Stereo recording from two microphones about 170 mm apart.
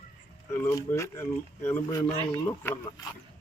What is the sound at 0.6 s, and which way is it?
Speech, 15° left (ahead or behind).